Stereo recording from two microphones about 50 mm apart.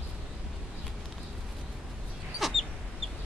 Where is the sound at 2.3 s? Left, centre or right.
Centre.